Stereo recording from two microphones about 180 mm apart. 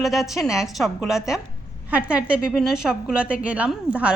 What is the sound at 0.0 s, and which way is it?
A woman's voice, centre (ahead or behind).